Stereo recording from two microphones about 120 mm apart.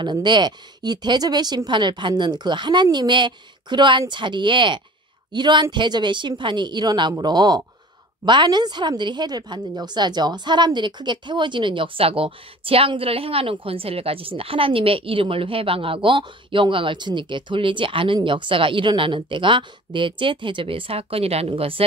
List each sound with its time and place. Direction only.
0.0 s a woman's voice: 40° right (ahead or behind)